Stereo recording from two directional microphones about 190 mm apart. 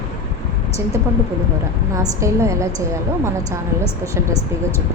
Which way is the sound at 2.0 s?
15° right (ahead or behind).